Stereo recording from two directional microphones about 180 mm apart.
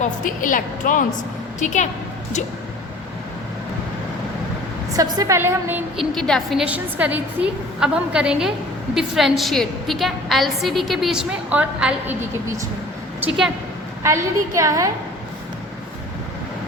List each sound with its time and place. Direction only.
0.0 s a woman's voice: 50° left (ahead or behind)
4.9 s a woman's voice: 20° right (ahead or behind)
6.0 s a woman's voice: 5° left (ahead or behind)
13.1 s a woman's voice: 5° right (ahead or behind)
14.0 s a woman's voice: 15° right (ahead or behind)